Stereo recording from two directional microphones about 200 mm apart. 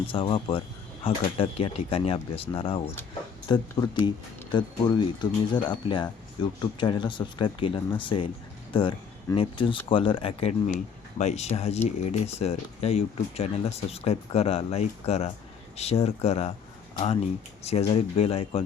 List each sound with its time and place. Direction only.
0.1 s speech: 25° left (ahead or behind)
17.6 s speech: 30° left (ahead or behind)